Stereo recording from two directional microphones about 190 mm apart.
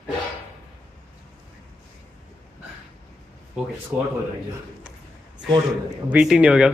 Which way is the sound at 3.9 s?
5° right (ahead or behind).